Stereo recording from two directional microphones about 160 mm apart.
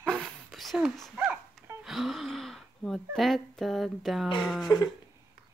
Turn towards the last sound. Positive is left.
turn(degrees=25)  # may be behind; listen again after turning